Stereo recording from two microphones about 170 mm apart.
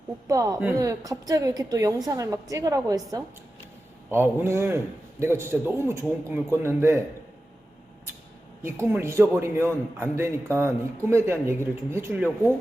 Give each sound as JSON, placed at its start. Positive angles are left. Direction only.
{"t": 0.3, "sound": "a woman's voice", "side_deg": -20}
{"t": 8.6, "sound": "a man's voice", "side_deg": -15}